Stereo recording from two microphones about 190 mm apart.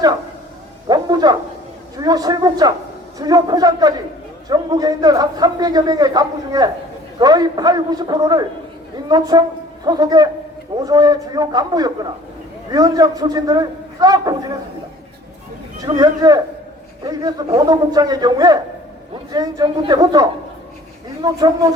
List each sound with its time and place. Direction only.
0.9 s a man's voice: 20° right (ahead or behind)
16.0 s a man's voice: 20° right (ahead or behind)